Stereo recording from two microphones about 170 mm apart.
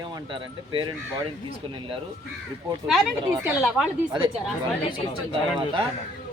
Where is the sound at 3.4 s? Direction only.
5° right (ahead or behind).